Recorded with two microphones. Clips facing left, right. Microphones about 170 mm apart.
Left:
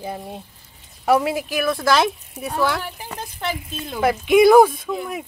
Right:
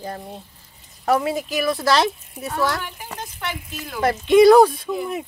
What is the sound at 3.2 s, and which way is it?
Speech, 30° left (ahead or behind).